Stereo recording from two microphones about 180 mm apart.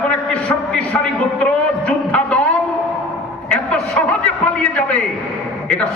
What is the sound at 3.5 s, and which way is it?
A man's voice, 5° left (ahead or behind).